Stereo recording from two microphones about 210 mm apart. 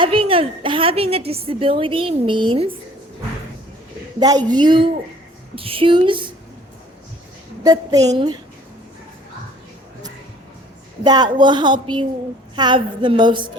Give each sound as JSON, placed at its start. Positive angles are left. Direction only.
{"t": 0.0, "sound": "a woman's voice", "side_deg": -25}
{"t": 4.2, "sound": "a woman's voice", "side_deg": -20}
{"t": 7.6, "sound": "a woman's voice", "side_deg": -15}
{"t": 11.0, "sound": "a woman's voice", "side_deg": -20}